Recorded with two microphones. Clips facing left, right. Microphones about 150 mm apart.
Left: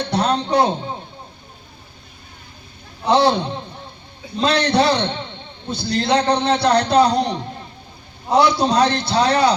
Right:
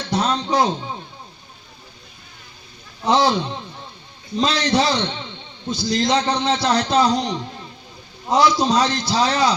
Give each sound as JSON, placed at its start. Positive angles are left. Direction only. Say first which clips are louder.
{"t": 0.0, "sound": "a man's voice", "louder": "left 2 dB", "side_deg": 60}
{"t": 3.1, "sound": "a man's voice", "louder": "left 2 dB", "side_deg": 65}